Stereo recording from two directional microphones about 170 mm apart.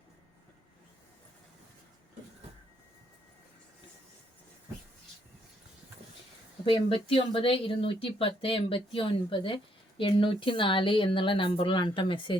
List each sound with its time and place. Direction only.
6.7 s speech: 30° left (ahead or behind)